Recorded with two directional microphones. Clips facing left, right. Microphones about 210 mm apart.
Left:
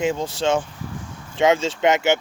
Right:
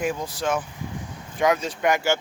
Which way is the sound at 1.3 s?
25° left (ahead or behind).